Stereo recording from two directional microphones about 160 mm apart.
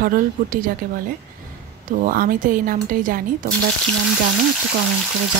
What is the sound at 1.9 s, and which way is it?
Speech, 60° right (ahead or behind).